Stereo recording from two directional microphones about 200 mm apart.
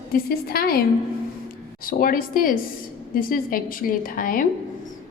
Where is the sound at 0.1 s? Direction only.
50° left (ahead or behind).